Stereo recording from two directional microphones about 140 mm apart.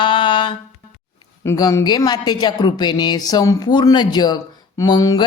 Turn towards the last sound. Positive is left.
turn(degrees=30)  # may be behind; listen again after turning